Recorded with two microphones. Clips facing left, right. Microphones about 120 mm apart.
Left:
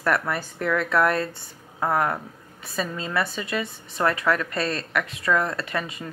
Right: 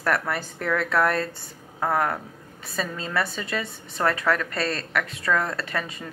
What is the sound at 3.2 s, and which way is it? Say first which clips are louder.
Speech: left 1 dB; 35° right (ahead or behind).